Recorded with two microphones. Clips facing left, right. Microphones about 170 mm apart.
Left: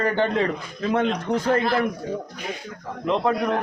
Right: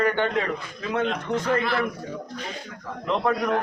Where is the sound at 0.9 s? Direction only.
40° left (ahead or behind).